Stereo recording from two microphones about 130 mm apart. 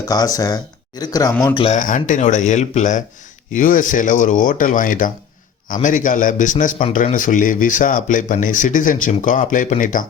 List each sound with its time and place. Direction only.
0.0 s speech: 30° left (ahead or behind)
1.7 s speech: 80° left
3.5 s speech: 90° left